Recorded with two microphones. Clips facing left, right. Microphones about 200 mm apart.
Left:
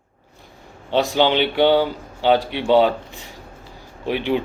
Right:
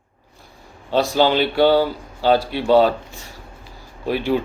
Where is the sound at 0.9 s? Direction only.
15° left (ahead or behind).